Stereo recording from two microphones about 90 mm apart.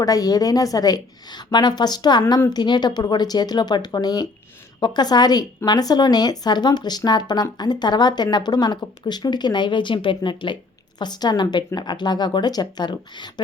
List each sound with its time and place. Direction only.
0.0 s speech: 45° left (ahead or behind)